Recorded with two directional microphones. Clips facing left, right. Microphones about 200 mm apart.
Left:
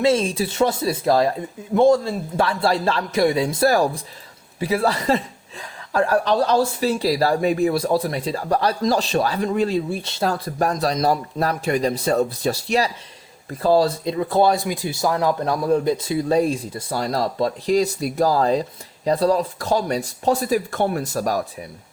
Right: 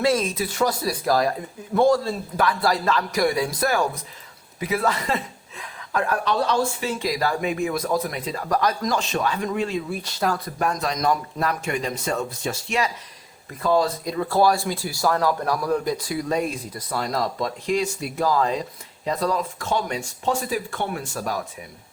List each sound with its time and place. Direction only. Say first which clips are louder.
0.0 s speech: left 3 dB; 25° left (ahead or behind)
3.7 s a woman's voice: left 4 dB; 35° left (ahead or behind)